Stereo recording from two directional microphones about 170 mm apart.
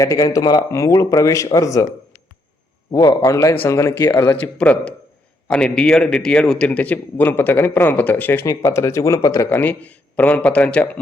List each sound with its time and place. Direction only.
0.0 s speech: 20° left (ahead or behind)
2.9 s a man's voice: 20° left (ahead or behind)